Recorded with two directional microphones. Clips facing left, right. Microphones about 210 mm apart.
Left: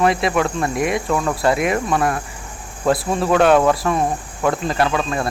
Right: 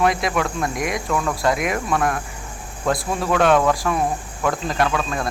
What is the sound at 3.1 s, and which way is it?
Speech, 30° left (ahead or behind).